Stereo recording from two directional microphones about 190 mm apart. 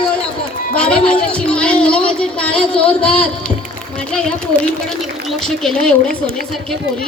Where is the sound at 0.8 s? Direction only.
5° left (ahead or behind).